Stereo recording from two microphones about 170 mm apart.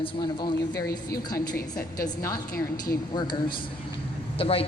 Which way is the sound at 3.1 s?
25° left (ahead or behind).